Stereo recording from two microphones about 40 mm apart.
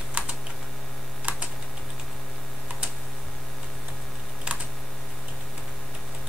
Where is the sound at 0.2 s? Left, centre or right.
Right.